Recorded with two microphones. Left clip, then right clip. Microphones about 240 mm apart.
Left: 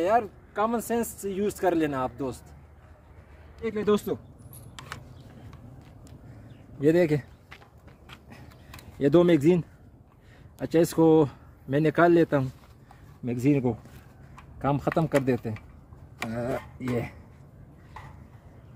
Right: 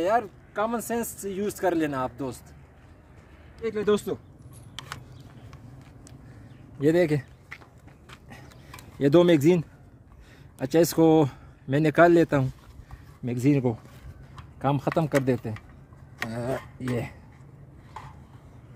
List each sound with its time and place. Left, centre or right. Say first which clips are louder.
0.0 s speech: even; centre
3.6 s speech: right 1 dB; centre
4.7 s a sound: right 2 dB; centre
6.8 s speech: even; right
8.9 s speech: right 1 dB; right